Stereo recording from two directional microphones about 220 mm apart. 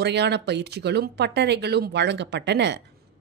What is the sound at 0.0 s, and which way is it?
Speech, 50° right (ahead or behind).